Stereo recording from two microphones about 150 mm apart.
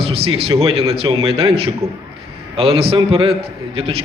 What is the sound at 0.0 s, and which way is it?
A man's voice, 40° right (ahead or behind).